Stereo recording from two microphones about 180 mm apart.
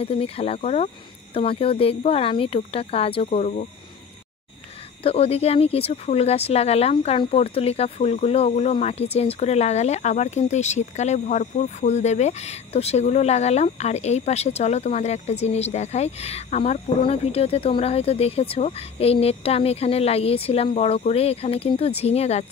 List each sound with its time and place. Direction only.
0.0 s speech: 30° left (ahead or behind)
5.0 s speech: 35° left (ahead or behind)